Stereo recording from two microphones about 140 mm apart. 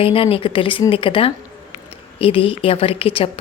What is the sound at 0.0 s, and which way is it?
A woman's voice, 40° left (ahead or behind).